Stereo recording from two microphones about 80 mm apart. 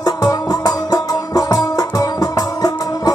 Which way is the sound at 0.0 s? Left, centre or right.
Left.